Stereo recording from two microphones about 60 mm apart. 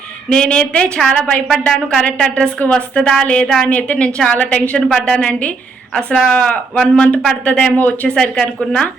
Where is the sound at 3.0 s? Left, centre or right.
Centre.